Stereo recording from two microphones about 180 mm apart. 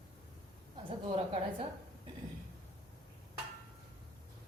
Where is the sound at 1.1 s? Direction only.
30° right (ahead or behind).